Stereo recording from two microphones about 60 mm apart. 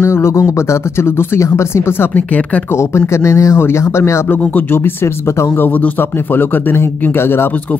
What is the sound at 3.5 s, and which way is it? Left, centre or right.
Speech, left.